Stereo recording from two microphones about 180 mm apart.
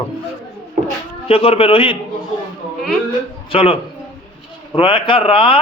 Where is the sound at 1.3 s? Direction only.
30° left (ahead or behind).